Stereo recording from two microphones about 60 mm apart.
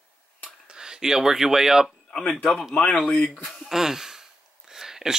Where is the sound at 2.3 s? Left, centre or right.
Centre.